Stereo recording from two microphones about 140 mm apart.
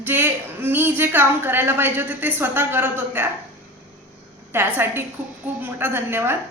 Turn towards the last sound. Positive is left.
turn(degrees=-15)  # may be behind; listen again after turning